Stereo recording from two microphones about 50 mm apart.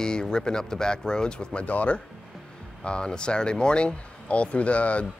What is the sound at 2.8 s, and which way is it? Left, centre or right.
Speech, centre.